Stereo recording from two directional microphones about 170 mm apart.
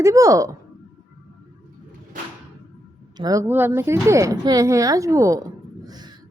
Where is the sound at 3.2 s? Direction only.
20° right (ahead or behind).